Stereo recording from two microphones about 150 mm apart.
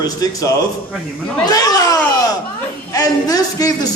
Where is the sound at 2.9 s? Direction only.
25° left (ahead or behind).